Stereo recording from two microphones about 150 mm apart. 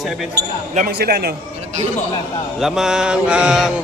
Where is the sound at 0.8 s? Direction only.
90° right.